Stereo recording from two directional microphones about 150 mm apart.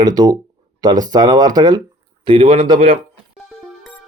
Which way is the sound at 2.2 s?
40° right (ahead or behind).